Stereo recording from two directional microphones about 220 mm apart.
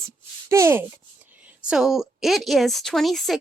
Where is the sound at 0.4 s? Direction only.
15° right (ahead or behind).